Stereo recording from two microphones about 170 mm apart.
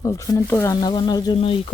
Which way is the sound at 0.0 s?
20° left (ahead or behind).